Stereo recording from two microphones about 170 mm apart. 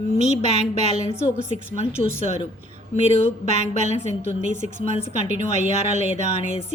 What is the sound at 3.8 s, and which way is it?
Speech, 45° right (ahead or behind).